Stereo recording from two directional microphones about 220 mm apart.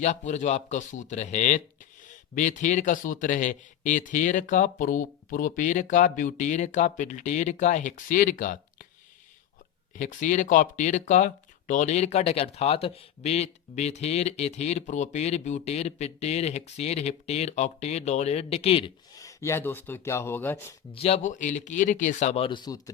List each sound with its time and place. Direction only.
0.0 s speech: 30° left (ahead or behind)
9.9 s speech: 35° left (ahead or behind)
19.1 s speech: 15° left (ahead or behind)
20.9 s speech: 25° left (ahead or behind)